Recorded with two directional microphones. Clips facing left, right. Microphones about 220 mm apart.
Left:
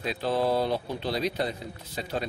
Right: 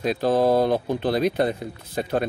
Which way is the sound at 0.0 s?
45° right (ahead or behind).